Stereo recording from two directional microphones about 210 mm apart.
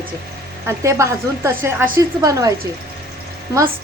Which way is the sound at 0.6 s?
15° right (ahead or behind).